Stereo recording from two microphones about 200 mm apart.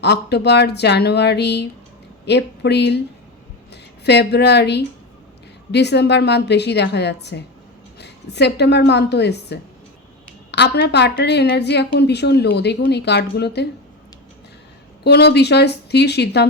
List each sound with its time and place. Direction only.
0.0 s a woman's voice: 55° left (ahead or behind)
15.0 s a woman's voice: 55° left (ahead or behind)